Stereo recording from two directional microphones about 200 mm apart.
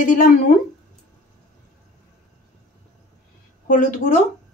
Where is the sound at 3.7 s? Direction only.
40° left (ahead or behind).